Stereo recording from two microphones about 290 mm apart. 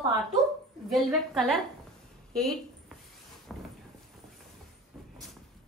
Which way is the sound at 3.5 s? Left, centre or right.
Centre.